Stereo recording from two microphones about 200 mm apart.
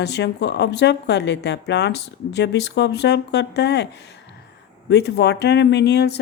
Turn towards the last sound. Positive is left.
turn(degrees=55)  # may be behind; listen again after turning